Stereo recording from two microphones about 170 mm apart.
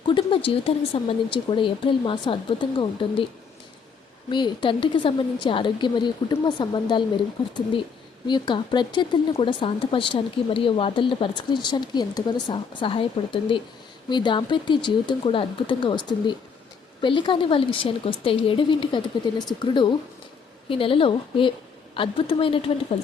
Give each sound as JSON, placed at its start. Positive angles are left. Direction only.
{"t": 0.0, "sound": "speech", "side_deg": 30}
{"t": 4.3, "sound": "speech", "side_deg": 25}
{"t": 8.3, "sound": "a woman's voice", "side_deg": 25}